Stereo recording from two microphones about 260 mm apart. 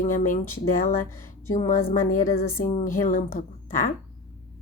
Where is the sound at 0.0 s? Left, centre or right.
Left.